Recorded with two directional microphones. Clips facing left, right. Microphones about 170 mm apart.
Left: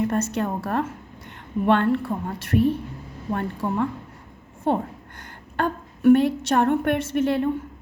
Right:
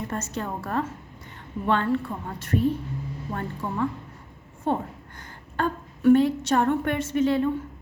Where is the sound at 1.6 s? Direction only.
65° left (ahead or behind).